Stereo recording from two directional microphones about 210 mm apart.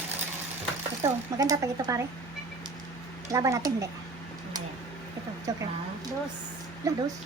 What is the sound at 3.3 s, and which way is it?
Speech, 15° right (ahead or behind).